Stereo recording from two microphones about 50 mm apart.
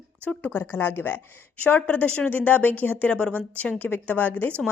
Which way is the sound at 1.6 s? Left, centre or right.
Left.